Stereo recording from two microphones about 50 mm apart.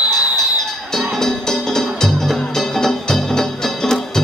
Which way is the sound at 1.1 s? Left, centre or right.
Centre.